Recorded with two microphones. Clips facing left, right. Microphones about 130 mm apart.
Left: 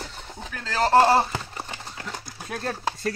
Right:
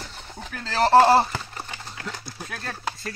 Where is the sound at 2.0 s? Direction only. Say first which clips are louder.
Right 1 dB; 20° left (ahead or behind).